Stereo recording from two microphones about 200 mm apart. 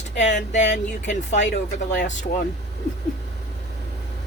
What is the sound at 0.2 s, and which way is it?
Speech, 35° left (ahead or behind).